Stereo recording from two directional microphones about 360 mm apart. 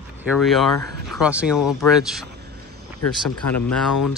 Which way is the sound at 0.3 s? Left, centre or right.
Centre.